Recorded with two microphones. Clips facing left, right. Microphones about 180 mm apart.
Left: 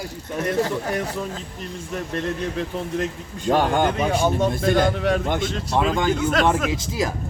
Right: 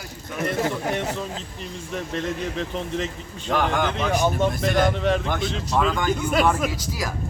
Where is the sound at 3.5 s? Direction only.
30° left (ahead or behind).